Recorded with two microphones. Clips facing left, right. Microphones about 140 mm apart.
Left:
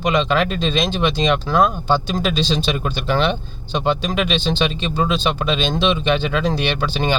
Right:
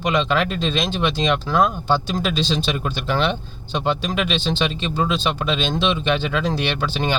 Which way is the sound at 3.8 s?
5° right (ahead or behind).